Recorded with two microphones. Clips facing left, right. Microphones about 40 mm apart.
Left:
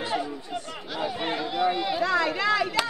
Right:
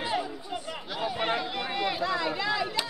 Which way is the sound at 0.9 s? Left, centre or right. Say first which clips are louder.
Even; centre.